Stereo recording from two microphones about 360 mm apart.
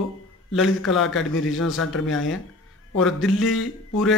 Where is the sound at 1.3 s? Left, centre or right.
Left.